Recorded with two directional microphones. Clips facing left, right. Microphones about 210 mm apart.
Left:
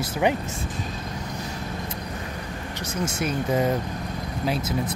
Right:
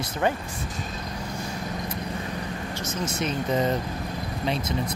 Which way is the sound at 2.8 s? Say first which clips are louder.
Left 2 dB; 10° left (ahead or behind).